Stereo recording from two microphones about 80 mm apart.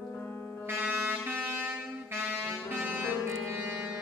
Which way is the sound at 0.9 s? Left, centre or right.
Right.